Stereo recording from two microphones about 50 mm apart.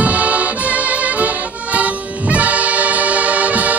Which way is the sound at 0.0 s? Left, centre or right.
Right.